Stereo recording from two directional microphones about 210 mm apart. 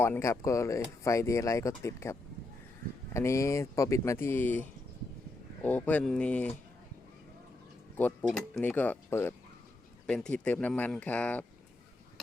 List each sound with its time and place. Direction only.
0.0 s speech: 10° left (ahead or behind)
8.3 s speech: 5° left (ahead or behind)